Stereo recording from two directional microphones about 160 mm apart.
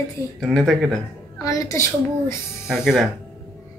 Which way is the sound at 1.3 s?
20° left (ahead or behind).